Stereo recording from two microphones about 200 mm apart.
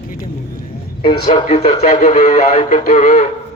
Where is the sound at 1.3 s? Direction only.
30° left (ahead or behind).